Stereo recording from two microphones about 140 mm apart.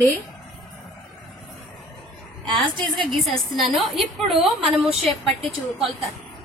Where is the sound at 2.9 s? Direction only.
Centre (ahead or behind).